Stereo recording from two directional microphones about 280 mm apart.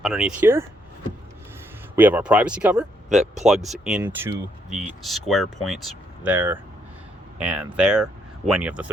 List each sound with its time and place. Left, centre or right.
0.0 s speech: centre
2.0 s speech: centre